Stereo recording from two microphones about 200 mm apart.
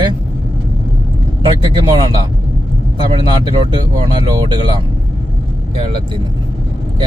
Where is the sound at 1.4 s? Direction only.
20° right (ahead or behind).